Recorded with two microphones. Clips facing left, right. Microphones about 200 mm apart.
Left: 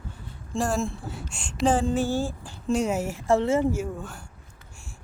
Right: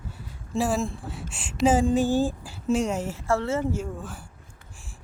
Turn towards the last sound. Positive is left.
turn(degrees=0)  # may be behind; listen again after turning